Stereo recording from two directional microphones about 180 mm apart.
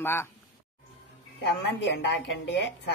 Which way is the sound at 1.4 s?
75° left (ahead or behind).